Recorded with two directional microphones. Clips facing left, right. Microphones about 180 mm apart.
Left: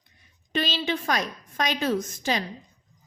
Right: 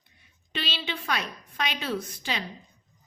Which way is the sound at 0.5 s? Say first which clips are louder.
Left 7 dB; 45° left (ahead or behind).